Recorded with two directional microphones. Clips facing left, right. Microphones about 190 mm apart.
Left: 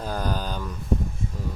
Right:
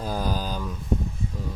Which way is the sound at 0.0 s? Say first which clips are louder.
Right 1 dB; 10° right (ahead or behind).